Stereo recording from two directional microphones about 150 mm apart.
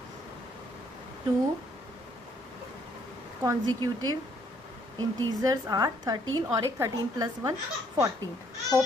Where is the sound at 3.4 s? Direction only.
25° right (ahead or behind).